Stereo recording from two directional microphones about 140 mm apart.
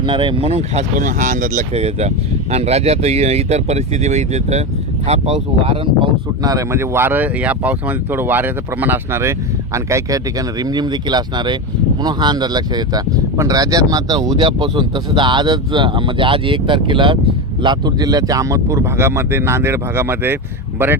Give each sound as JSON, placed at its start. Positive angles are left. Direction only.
{"t": 0.0, "sound": "speech", "side_deg": -35}
{"t": 6.4, "sound": "speech", "side_deg": -25}